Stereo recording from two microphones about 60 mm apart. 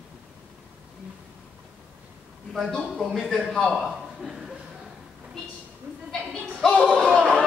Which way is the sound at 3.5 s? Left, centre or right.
Centre.